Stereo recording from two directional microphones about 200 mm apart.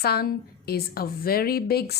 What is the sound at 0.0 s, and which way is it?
A woman's voice, 50° left (ahead or behind).